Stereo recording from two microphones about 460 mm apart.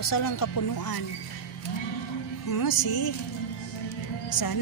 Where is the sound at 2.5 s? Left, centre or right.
Left.